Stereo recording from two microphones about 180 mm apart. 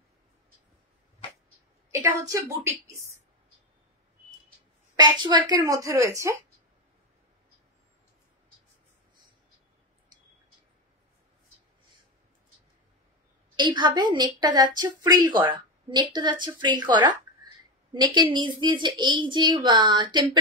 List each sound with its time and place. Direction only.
1.9 s a woman's voice: 15° right (ahead or behind)
4.9 s speech: 25° right (ahead or behind)
13.6 s speech: 25° right (ahead or behind)